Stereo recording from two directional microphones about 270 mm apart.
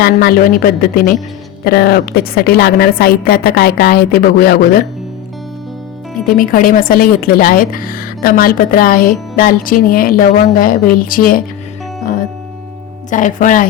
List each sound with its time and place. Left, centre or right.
0.0 s a woman's voice: left
6.2 s a woman's voice: left
13.1 s speech: left